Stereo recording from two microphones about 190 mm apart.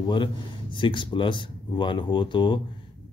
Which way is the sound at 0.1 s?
25° left (ahead or behind).